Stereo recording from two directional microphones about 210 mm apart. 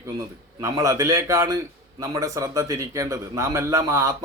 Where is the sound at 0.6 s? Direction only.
15° right (ahead or behind).